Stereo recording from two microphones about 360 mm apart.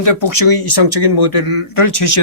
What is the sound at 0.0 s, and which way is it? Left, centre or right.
Speech, left.